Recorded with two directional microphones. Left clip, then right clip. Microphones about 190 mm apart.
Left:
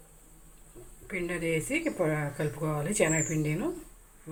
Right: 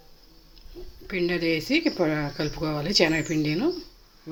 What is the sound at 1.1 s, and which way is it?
Speech, 40° right (ahead or behind).